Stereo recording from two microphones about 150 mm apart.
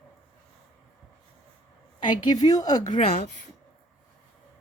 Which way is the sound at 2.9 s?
40° left (ahead or behind).